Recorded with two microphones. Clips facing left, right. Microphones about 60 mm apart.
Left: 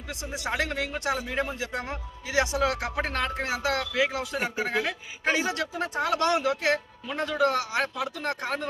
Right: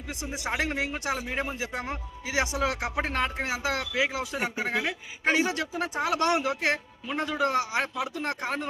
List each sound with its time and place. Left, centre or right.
0.3 s a man's voice: centre